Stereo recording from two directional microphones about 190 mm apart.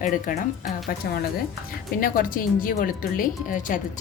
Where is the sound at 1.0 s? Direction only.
55° left (ahead or behind).